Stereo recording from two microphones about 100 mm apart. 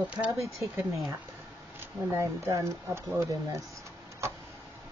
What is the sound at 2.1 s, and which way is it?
Speech, 25° right (ahead or behind).